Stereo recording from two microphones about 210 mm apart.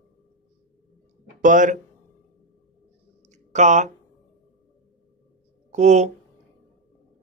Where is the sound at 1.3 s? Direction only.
40° right (ahead or behind).